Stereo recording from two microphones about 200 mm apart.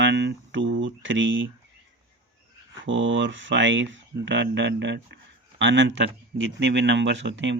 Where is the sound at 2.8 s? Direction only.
70° right (ahead or behind).